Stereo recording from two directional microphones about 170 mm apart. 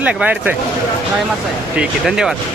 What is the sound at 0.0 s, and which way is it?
Speech, 10° right (ahead or behind).